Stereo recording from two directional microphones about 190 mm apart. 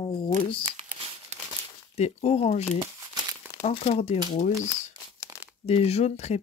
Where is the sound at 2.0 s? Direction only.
35° left (ahead or behind).